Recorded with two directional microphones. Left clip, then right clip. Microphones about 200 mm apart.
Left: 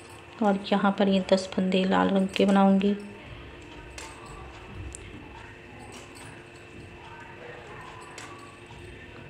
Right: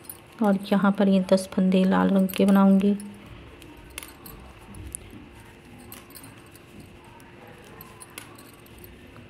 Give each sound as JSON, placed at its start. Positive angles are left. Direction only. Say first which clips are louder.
{"t": 0.4, "sound": "speech", "louder": "right 1 dB", "side_deg": -35}